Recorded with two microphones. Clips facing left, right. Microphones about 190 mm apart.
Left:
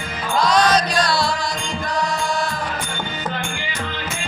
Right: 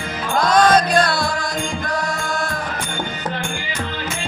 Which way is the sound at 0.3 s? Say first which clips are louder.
Right 2 dB; 50° right (ahead or behind).